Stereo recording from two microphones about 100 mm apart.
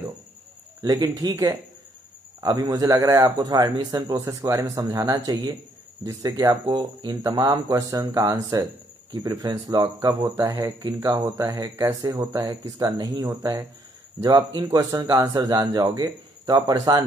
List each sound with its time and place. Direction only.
0.8 s a man's voice: 40° right (ahead or behind)
2.4 s a man's voice: 40° right (ahead or behind)